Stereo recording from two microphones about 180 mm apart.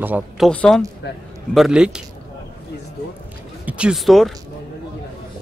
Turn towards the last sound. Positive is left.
turn(degrees=0)  # may be behind; listen again after turning